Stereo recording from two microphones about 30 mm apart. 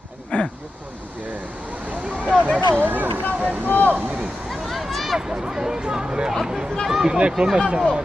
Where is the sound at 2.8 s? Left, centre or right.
Right.